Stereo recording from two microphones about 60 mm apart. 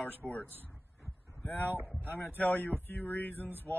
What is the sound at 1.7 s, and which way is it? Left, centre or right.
Speech, right.